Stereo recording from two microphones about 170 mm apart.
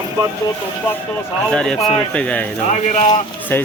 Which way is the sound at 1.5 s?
5° left (ahead or behind).